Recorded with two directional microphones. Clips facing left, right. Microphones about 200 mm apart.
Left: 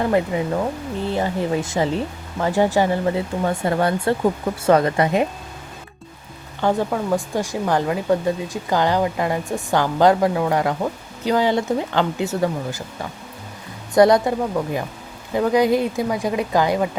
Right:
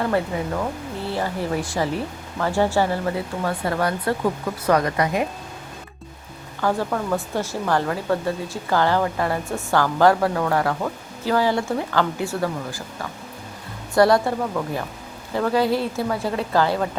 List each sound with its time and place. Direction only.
0.0 s speech: 15° left (ahead or behind)
6.6 s speech: 20° left (ahead or behind)